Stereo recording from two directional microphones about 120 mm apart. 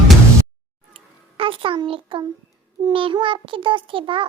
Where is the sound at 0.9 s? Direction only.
50° right (ahead or behind).